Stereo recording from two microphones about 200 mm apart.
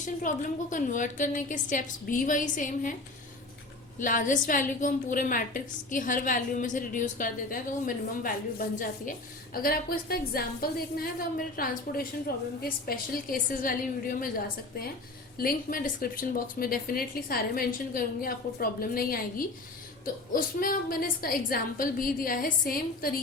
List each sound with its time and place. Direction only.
0.0 s a woman's voice: 40° left (ahead or behind)
4.0 s a woman's voice: 40° left (ahead or behind)
20.3 s a woman's voice: 45° left (ahead or behind)